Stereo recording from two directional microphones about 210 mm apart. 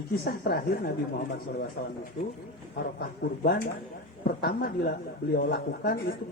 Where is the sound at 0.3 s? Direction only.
50° left (ahead or behind).